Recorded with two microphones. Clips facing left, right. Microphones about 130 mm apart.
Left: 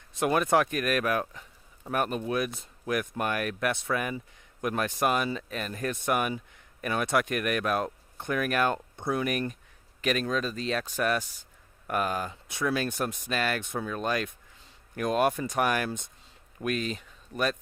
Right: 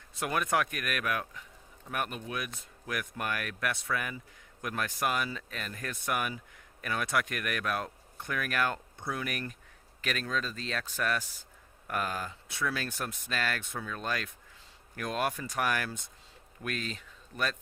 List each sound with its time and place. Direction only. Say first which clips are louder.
0.2 s speech: left 6 dB; 30° left (ahead or behind)